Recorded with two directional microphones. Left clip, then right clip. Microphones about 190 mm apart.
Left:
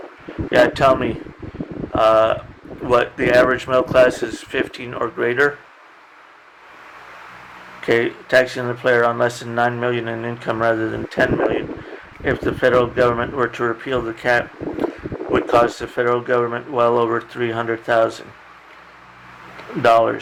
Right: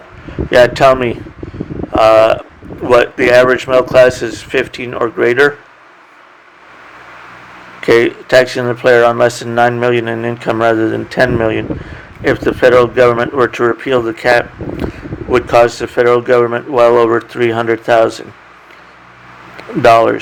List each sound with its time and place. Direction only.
0.5 s speech: 35° right (ahead or behind)
7.8 s speech: 40° right (ahead or behind)
19.8 s speech: 35° right (ahead or behind)